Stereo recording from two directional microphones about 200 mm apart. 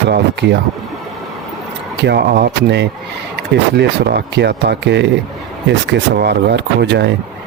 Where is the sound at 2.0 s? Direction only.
55° right (ahead or behind).